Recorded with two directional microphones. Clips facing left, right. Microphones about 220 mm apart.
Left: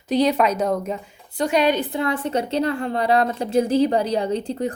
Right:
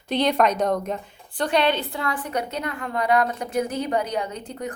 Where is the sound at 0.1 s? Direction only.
5° left (ahead or behind).